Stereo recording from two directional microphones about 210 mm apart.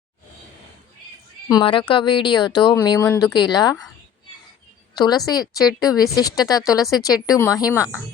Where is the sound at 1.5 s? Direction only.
20° left (ahead or behind).